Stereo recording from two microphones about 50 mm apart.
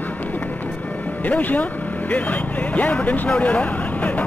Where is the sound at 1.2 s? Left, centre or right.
Left.